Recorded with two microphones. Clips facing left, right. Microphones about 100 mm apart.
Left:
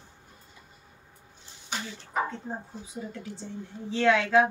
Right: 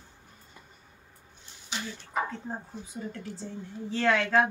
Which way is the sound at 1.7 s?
50° left (ahead or behind).